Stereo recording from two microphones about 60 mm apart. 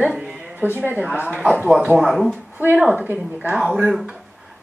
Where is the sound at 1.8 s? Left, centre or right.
Centre.